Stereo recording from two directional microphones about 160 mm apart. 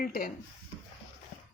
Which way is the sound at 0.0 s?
65° left (ahead or behind).